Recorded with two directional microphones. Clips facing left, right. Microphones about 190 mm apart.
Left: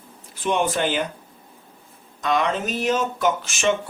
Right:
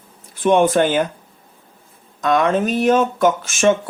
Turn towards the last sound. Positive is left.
turn(degrees=-50)  # may be behind; listen again after turning